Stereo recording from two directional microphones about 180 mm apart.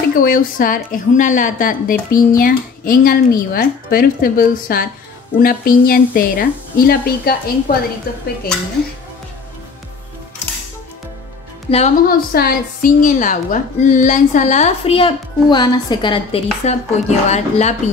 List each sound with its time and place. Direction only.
0.1 s a woman's voice: 50° left (ahead or behind)
11.7 s a woman's voice: 30° left (ahead or behind)
12.1 s a woman's voice: 55° left (ahead or behind)